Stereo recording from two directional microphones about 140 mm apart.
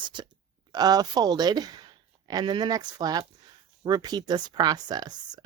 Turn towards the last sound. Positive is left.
turn(degrees=-30)  # may be behind; listen again after turning